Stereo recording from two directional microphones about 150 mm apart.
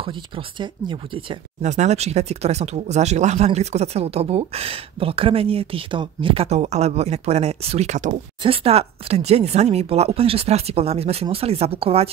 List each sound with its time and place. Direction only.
0.0 s speech: 35° right (ahead or behind)
1.6 s speech: 50° right (ahead or behind)